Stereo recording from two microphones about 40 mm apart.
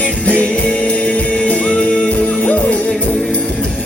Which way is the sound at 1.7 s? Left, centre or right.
Left.